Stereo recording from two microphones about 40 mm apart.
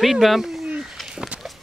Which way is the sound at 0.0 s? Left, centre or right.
Centre.